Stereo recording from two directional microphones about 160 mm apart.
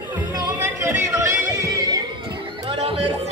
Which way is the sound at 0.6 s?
15° right (ahead or behind).